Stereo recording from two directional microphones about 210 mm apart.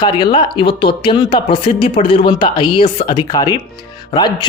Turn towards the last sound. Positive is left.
turn(degrees=20)  # may be behind; listen again after turning